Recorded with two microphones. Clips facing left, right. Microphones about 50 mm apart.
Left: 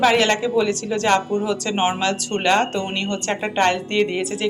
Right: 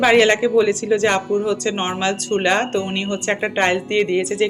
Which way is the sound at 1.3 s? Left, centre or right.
Centre.